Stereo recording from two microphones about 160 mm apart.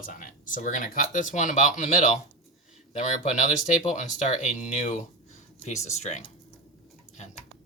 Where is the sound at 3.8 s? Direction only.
50° left (ahead or behind).